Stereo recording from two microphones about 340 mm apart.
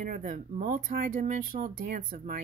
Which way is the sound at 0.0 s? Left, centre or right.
Right.